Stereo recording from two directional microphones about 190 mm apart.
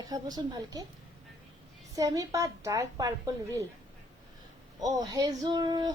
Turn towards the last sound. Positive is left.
turn(degrees=-20)  # may be behind; listen again after turning